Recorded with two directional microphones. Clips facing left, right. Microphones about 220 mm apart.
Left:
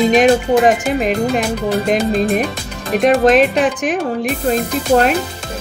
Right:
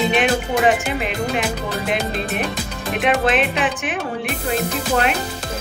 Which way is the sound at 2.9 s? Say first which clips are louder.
Left 8 dB; 40° left (ahead or behind).